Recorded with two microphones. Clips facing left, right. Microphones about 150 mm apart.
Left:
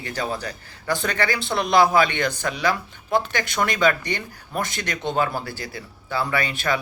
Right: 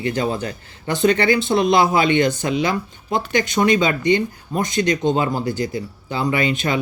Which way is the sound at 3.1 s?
20° right (ahead or behind).